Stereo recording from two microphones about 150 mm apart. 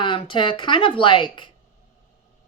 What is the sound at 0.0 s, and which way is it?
Speech, 35° left (ahead or behind).